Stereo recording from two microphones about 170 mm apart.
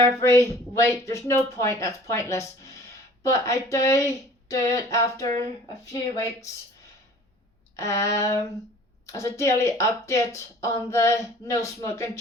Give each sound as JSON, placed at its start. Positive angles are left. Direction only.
{"t": 0.0, "sound": "a woman's voice", "side_deg": 15}
{"t": 7.8, "sound": "a woman's voice", "side_deg": 15}